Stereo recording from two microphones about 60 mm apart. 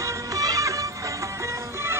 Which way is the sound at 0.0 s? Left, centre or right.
Right.